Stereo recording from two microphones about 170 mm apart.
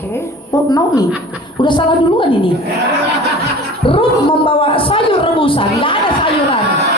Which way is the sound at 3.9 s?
30° left (ahead or behind).